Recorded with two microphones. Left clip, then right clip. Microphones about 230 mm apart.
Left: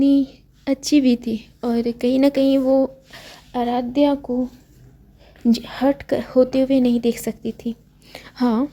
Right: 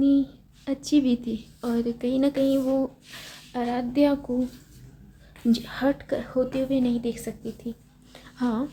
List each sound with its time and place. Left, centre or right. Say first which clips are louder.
0.0 s a woman's voice: left 5 dB; left
5.5 s a woman's voice: left 5 dB; left